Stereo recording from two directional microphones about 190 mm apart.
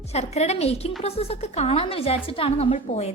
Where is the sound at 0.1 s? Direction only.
35° left (ahead or behind).